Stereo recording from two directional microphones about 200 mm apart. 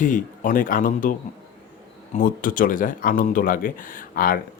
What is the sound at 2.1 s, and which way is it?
Speech, 45° left (ahead or behind).